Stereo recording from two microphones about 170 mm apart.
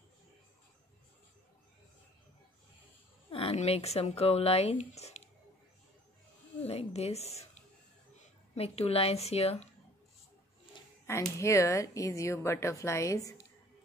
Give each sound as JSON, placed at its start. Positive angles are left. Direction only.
{"t": 3.3, "sound": "speech", "side_deg": 35}
{"t": 6.6, "sound": "a woman's voice", "side_deg": 40}
{"t": 11.1, "sound": "speech", "side_deg": 15}